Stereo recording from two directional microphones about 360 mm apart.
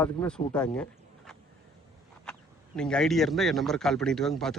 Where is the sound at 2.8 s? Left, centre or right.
Centre.